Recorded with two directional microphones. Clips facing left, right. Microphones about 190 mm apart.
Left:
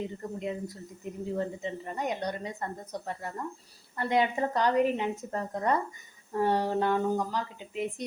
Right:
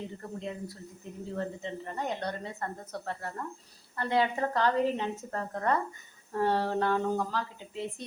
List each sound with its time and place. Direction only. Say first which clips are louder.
0.2 s speech: left 3 dB; 15° left (ahead or behind)